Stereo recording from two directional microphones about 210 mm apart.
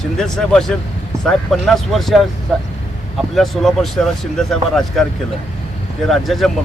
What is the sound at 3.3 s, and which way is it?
Speech, centre (ahead or behind).